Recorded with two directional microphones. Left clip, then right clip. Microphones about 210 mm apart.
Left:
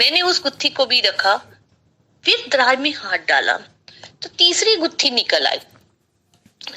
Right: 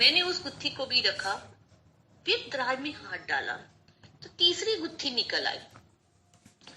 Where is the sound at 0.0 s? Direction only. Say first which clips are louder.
Left 8 dB; 45° left (ahead or behind).